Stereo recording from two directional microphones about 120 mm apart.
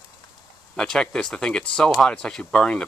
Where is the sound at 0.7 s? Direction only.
5° left (ahead or behind).